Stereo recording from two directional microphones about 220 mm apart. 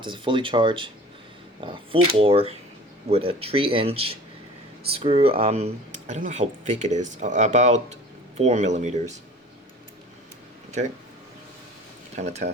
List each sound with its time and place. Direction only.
0.0 s speech: 20° right (ahead or behind)
12.1 s speech: 30° right (ahead or behind)